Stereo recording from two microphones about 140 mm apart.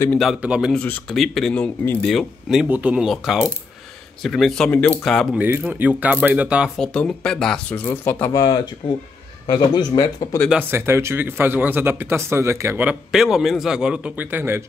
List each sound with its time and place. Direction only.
0.4 s speech: 5° right (ahead or behind)
0.7 s speech: 5° left (ahead or behind)
2.7 s speech: 10° right (ahead or behind)
5.4 s speech: 10° right (ahead or behind)
6.8 s speech: 5° left (ahead or behind)
8.4 s a man's voice: 30° left (ahead or behind)
10.7 s speech: 20° right (ahead or behind)